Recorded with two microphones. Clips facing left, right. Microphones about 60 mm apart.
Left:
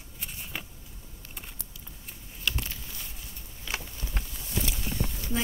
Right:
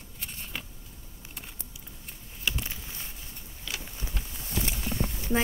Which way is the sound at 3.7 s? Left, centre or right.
Left.